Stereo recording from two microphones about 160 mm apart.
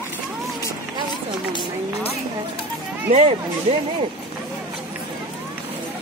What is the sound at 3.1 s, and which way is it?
Speech, 35° right (ahead or behind).